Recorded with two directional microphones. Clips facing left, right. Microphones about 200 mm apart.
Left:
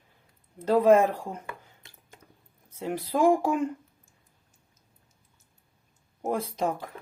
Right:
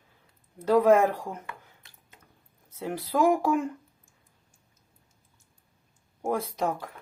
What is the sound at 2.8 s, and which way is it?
Speech, 20° left (ahead or behind).